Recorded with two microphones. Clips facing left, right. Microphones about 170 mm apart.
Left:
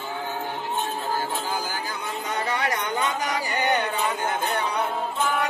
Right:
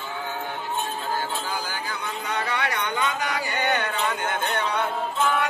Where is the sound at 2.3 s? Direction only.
40° left (ahead or behind).